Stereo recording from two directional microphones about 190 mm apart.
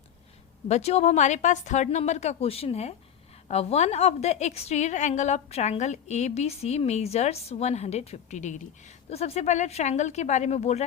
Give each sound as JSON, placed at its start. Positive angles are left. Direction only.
{"t": 0.7, "sound": "a woman's voice", "side_deg": 35}